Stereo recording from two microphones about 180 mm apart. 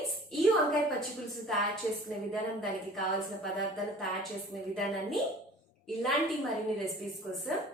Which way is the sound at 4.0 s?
Centre (ahead or behind).